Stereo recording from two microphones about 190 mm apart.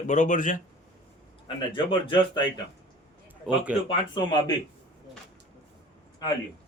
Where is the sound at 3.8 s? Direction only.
20° left (ahead or behind).